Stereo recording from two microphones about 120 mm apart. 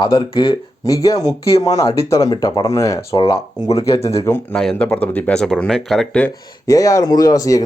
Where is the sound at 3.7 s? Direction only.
55° left (ahead or behind).